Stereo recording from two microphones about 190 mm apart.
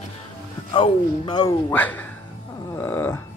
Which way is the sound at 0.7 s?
25° left (ahead or behind).